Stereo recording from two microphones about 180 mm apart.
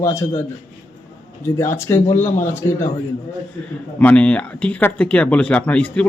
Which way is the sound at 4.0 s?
5° left (ahead or behind).